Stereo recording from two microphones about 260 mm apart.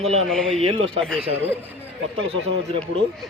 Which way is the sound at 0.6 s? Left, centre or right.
Right.